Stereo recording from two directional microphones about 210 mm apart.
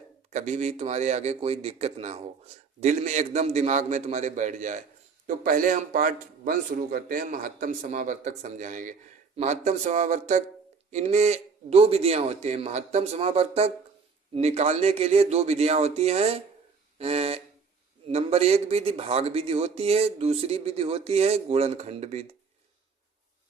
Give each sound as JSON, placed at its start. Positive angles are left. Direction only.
{"t": 0.3, "sound": "a man's voice", "side_deg": -35}